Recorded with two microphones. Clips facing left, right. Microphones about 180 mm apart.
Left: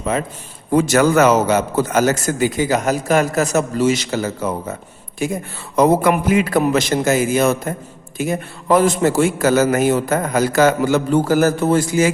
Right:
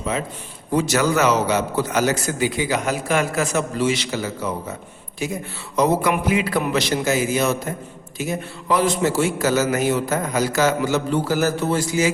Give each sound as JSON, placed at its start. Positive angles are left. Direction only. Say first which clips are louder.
{"t": 0.7, "sound": "a man's voice", "louder": "left 5 dB", "side_deg": 50}